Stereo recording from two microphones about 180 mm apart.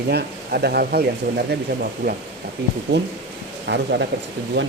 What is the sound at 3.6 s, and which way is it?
Speech, 70° right (ahead or behind).